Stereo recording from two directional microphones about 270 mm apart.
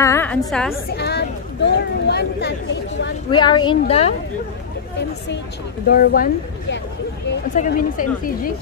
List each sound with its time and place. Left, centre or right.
0.0 s a woman's voice: centre
0.9 s speech: left
3.3 s speech: centre
5.9 s speech: left